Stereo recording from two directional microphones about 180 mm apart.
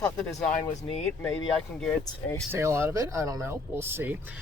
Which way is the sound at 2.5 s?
15° right (ahead or behind).